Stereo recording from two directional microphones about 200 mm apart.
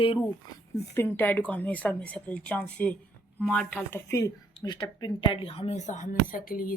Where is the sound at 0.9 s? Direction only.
10° left (ahead or behind).